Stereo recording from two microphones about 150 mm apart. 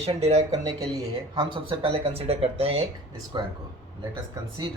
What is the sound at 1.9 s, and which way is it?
Speech, 40° right (ahead or behind).